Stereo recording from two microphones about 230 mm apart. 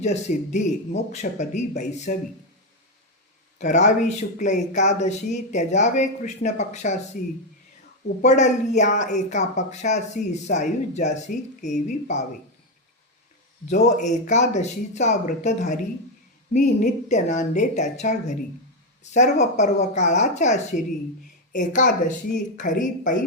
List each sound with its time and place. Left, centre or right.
0.0 s speech: left
3.6 s speech: left
14.0 s speech: left